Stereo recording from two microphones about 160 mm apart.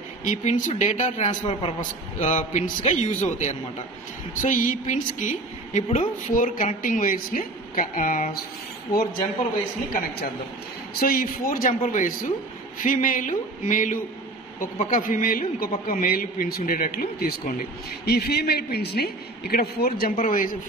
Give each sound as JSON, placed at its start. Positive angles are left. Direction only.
{"t": 0.2, "sound": "a man's voice", "side_deg": 50}
{"t": 1.5, "sound": "a woman's voice", "side_deg": 35}
{"t": 1.8, "sound": "a man's voice", "side_deg": 50}
{"t": 11.0, "sound": "a man's voice", "side_deg": 65}
{"t": 18.0, "sound": "speech", "side_deg": 80}